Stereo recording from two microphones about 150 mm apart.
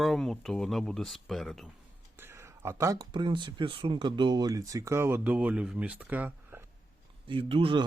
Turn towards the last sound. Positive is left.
turn(degrees=-35)  # may be behind; listen again after turning